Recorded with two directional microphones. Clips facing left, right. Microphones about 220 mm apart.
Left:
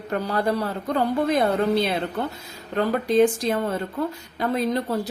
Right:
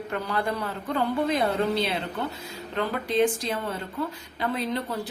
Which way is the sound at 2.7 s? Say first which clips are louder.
Left 6 dB; 45° left (ahead or behind).